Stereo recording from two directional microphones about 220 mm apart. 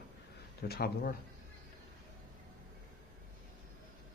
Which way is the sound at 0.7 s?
45° left (ahead or behind).